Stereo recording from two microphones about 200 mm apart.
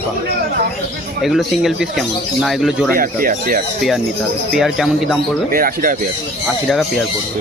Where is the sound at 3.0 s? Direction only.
45° right (ahead or behind).